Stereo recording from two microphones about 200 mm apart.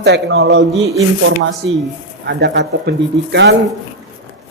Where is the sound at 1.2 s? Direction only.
75° right (ahead or behind).